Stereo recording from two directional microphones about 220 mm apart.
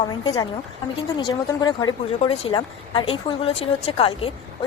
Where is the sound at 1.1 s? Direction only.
20° left (ahead or behind).